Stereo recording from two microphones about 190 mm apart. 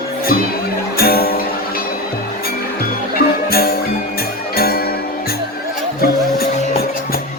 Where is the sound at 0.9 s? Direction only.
55° left (ahead or behind).